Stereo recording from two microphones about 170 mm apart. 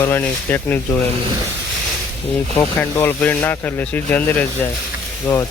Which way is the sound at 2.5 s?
10° left (ahead or behind).